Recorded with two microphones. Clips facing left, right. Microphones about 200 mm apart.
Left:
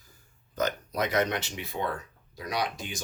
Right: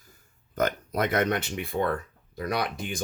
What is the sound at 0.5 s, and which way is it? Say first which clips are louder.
Speech: right 3 dB; 55° right (ahead or behind).